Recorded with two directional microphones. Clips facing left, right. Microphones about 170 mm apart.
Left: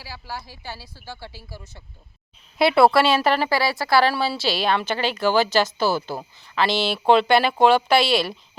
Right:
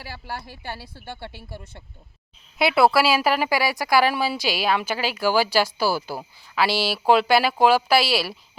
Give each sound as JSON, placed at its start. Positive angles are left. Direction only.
{"t": 0.0, "sound": "speech", "side_deg": -55}
{"t": 2.6, "sound": "speech", "side_deg": 0}